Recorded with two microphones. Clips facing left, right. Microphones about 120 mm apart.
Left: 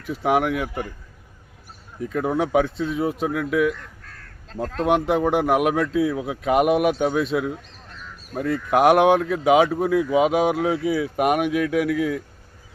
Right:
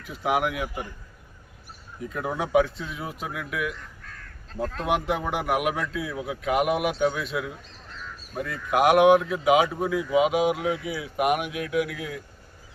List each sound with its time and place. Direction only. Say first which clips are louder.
0.2 s speech: left 5 dB; 35° left (ahead or behind)
2.2 s speech: left 2 dB; 35° left (ahead or behind)
4.8 s speech: left 7 dB; 35° left (ahead or behind)